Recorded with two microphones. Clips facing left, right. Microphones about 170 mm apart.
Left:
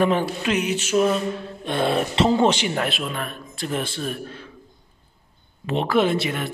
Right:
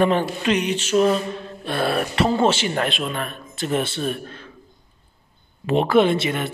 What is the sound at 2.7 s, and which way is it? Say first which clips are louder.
A man's voice: right 2 dB; 5° left (ahead or behind).